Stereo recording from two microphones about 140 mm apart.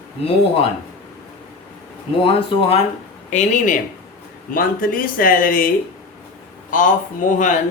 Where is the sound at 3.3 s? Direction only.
60° left (ahead or behind).